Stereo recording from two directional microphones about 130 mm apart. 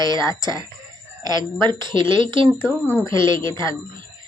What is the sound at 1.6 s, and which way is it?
A woman's voice, 35° right (ahead or behind).